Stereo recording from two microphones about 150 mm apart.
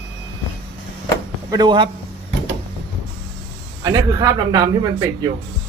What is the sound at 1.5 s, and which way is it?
Speech, 30° right (ahead or behind).